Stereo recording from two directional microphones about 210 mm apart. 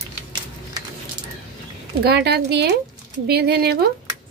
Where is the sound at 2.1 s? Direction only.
50° right (ahead or behind).